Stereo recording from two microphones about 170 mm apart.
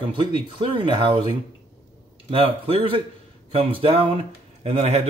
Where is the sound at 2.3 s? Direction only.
35° right (ahead or behind).